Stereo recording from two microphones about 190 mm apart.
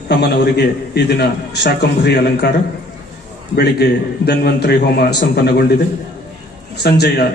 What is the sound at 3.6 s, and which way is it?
A man's voice, 60° left (ahead or behind).